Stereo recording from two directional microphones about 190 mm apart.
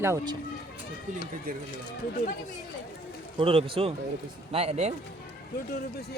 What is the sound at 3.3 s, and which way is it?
A man's voice, 30° right (ahead or behind).